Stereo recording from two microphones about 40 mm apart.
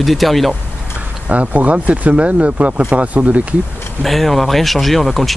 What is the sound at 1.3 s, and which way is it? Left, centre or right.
Speech, right.